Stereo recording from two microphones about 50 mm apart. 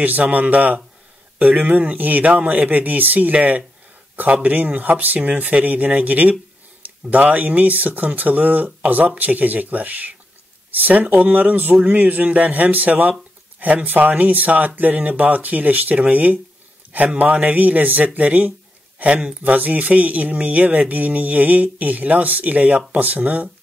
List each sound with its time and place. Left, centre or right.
0.0 s speech: right
19.4 s speech: right